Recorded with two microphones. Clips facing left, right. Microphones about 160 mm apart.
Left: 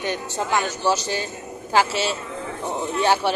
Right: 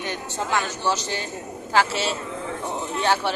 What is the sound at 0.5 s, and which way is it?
Speech, 10° left (ahead or behind).